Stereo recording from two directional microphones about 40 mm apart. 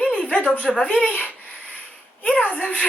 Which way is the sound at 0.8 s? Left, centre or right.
Left.